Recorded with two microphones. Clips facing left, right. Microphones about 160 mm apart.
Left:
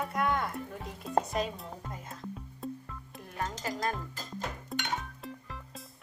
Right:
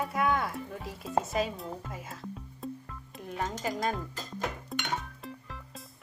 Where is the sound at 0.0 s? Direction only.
Centre (ahead or behind).